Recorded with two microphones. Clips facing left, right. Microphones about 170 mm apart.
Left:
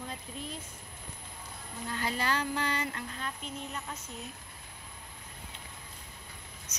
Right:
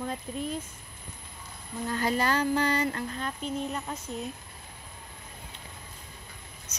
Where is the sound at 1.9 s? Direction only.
45° right (ahead or behind).